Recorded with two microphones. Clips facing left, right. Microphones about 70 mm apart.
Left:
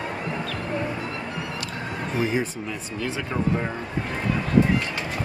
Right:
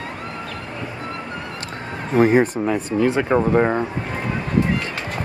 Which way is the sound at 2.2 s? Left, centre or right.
Right.